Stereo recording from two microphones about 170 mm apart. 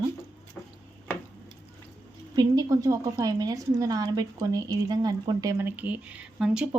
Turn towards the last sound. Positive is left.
turn(degrees=-5)  # may be behind; listen again after turning